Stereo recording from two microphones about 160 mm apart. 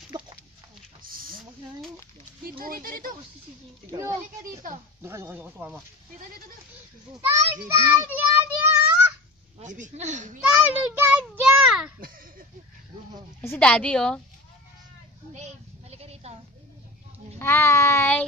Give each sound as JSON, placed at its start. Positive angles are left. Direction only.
{"t": 0.1, "sound": "chicken", "side_deg": -30}
{"t": 1.0, "sound": "a sound", "side_deg": -65}
{"t": 2.6, "sound": "speech", "side_deg": -60}
{"t": 3.9, "sound": "a child's voice", "side_deg": -20}
{"t": 9.6, "sound": "speech", "side_deg": -50}
{"t": 10.4, "sound": "a child's voice", "side_deg": -10}
{"t": 13.4, "sound": "a woman's voice", "side_deg": 10}
{"t": 15.3, "sound": "a sound", "side_deg": -45}
{"t": 17.4, "sound": "a woman's voice", "side_deg": 15}